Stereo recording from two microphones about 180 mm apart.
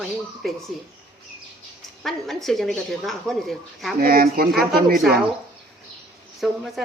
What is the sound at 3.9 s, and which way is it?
Speech, 55° right (ahead or behind).